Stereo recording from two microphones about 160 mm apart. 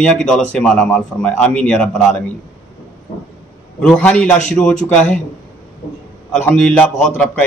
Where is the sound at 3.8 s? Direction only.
5° left (ahead or behind).